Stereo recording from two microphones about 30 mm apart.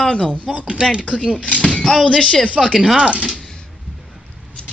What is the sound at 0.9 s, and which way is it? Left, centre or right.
Speech, left.